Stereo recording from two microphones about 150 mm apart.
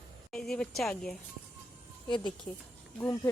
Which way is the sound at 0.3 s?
5° left (ahead or behind).